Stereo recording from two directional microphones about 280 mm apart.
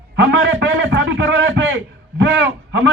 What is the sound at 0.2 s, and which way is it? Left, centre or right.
A man's voice, right.